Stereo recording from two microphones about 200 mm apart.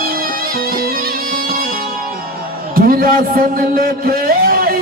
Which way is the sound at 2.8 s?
45° right (ahead or behind).